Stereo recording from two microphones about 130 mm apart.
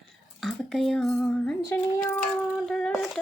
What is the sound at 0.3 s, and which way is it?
Speech, centre (ahead or behind).